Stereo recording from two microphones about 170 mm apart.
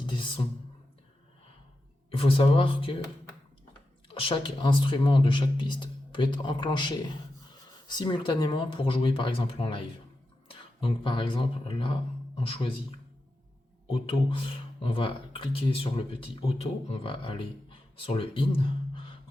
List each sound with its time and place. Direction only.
0.0 s a sound: 30° left (ahead or behind)
2.0 s speech: 30° left (ahead or behind)
4.1 s speech: 30° left (ahead or behind)